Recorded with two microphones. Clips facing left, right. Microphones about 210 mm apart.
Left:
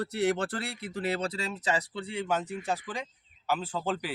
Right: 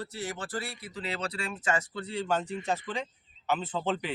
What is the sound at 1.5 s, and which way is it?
Speech, 20° left (ahead or behind).